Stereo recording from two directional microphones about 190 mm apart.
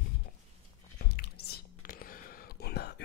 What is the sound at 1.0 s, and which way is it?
Whispering, 55° left (ahead or behind).